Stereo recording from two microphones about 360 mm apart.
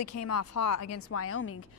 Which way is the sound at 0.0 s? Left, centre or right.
Left.